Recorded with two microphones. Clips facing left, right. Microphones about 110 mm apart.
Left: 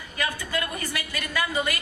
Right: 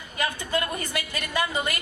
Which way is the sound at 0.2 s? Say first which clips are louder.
Right 2 dB; 25° right (ahead or behind).